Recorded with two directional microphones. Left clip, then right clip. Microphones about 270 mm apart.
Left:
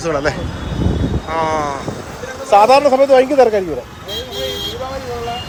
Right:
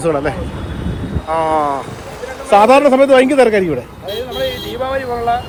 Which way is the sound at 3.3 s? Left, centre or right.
Right.